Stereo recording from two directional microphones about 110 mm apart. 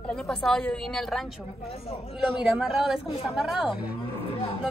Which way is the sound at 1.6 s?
60° left (ahead or behind).